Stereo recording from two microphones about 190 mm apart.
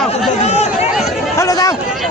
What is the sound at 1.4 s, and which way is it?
Speech, 20° left (ahead or behind).